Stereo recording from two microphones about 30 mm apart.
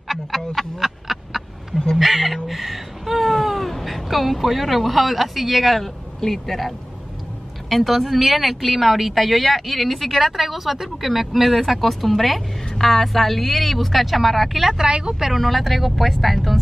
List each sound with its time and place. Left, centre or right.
0.3 s speech: centre
0.7 s duck: centre
2.0 s speech: centre
2.4 s a sound: centre
3.7 s speech: centre
7.7 s speech: centre
14.8 s speech: right
15.3 s speech: centre